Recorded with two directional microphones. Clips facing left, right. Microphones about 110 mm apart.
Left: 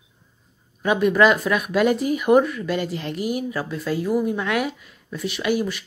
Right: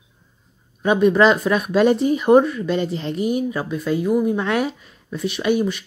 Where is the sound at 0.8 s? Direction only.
25° right (ahead or behind).